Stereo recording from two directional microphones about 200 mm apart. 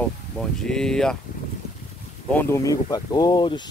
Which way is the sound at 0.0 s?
5° left (ahead or behind).